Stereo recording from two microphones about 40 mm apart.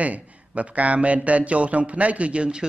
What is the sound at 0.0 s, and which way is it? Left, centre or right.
A man's voice, right.